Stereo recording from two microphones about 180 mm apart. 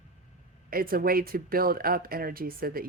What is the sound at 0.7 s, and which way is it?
Speech, 55° right (ahead or behind).